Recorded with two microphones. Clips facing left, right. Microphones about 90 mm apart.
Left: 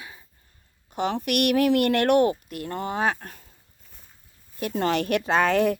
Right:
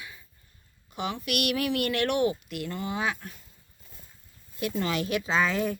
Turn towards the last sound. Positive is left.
turn(degrees=65)  # may be behind; listen again after turning